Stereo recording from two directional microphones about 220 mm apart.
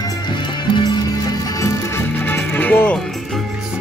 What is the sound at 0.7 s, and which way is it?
Music, 20° left (ahead or behind).